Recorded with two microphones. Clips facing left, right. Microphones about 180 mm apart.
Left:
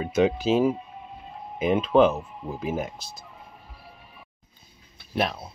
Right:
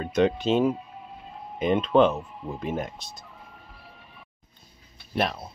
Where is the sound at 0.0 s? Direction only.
5° left (ahead or behind).